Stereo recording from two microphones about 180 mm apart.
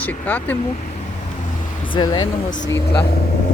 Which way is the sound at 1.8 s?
25° left (ahead or behind).